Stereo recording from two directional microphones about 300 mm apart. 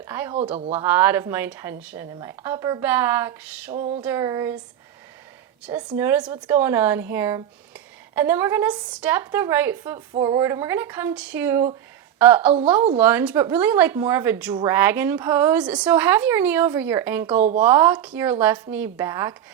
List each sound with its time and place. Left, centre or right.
0.0 s speech: centre
0.5 s speech: right
0.9 s a woman's voice: centre
3.8 s speech: right
4.0 s a woman's voice: centre
5.6 s a woman's voice: centre